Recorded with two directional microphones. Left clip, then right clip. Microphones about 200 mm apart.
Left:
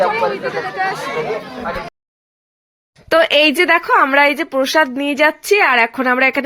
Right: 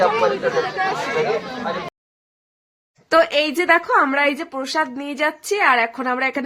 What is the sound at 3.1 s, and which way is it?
A woman's voice, 25° left (ahead or behind).